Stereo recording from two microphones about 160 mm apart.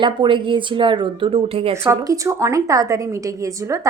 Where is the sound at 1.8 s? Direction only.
20° right (ahead or behind).